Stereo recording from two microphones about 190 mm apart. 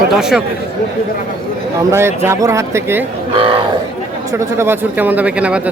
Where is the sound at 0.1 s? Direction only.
5° right (ahead or behind).